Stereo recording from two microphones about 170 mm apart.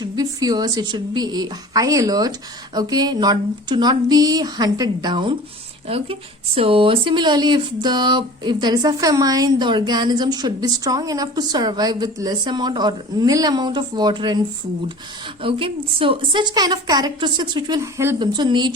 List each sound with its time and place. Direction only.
0.0 s speech: 20° right (ahead or behind)
15.4 s speech: 30° right (ahead or behind); by 18.2 s 15° right (ahead or behind)
18.2 s speech: 25° right (ahead or behind)